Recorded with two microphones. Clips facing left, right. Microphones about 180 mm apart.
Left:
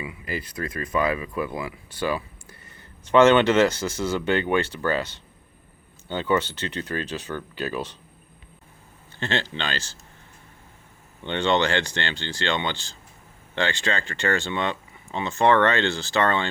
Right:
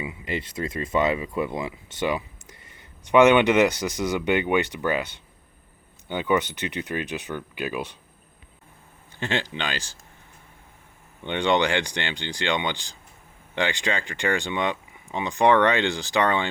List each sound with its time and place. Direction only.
0.0 s speech: 25° right (ahead or behind)
9.1 s speech: 15° right (ahead or behind)
11.2 s speech: 15° right (ahead or behind)